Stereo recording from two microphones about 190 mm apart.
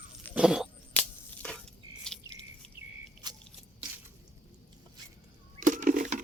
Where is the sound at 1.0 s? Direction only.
5° left (ahead or behind).